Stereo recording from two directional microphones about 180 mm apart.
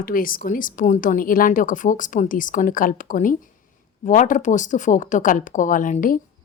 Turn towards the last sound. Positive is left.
turn(degrees=50)  # may be behind; listen again after turning